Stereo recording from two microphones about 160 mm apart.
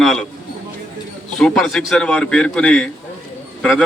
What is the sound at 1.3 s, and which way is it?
A man's voice, 5° left (ahead or behind).